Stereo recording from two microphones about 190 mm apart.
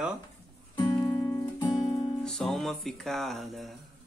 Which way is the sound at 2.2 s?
Centre (ahead or behind).